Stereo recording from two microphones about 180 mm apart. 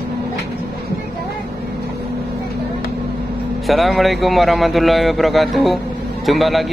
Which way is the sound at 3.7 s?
Centre (ahead or behind).